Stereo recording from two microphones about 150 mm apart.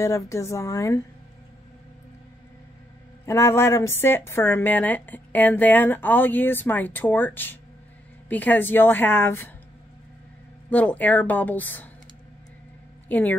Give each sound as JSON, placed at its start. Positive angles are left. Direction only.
{"t": 0.0, "sound": "a woman's voice", "side_deg": 20}
{"t": 3.3, "sound": "a woman's voice", "side_deg": 20}
{"t": 10.7, "sound": "a woman's voice", "side_deg": 10}
{"t": 13.1, "sound": "a woman's voice", "side_deg": 10}